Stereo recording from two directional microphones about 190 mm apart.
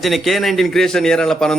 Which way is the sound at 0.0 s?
Centre (ahead or behind).